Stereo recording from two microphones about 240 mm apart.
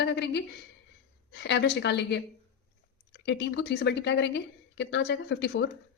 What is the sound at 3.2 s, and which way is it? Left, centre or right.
A woman's voice, left.